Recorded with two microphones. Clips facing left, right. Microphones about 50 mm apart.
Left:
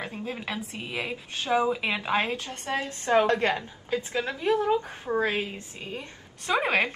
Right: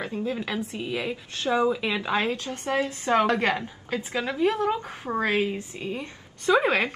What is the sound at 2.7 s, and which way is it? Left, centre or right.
Speech, right.